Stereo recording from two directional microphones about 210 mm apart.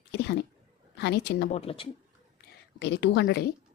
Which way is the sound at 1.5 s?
30° left (ahead or behind).